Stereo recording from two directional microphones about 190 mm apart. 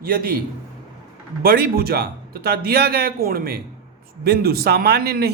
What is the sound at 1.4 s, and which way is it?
A man's voice, 55° right (ahead or behind).